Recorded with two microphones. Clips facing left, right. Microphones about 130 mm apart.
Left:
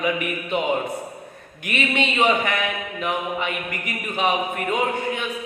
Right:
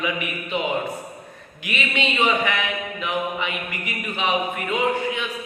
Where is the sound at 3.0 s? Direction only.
45° left (ahead or behind).